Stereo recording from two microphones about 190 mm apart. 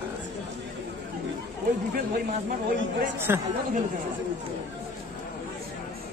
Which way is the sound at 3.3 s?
15° right (ahead or behind).